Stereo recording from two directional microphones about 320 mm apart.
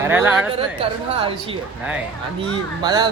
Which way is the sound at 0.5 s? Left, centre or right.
Centre.